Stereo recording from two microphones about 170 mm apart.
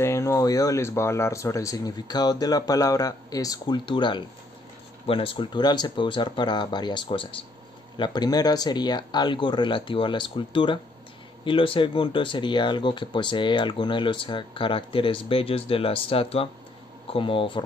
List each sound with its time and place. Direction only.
0.0 s speech: 15° left (ahead or behind)